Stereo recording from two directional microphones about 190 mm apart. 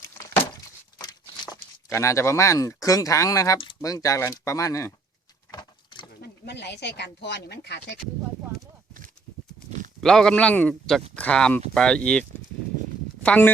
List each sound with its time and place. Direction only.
0.9 s a sound: 20° left (ahead or behind)
1.9 s speech: 15° left (ahead or behind)
5.5 s vehicle: 25° left (ahead or behind)
6.2 s speech: 60° left (ahead or behind)
10.0 s a man's voice: 5° left (ahead or behind)
13.2 s speech: 5° left (ahead or behind)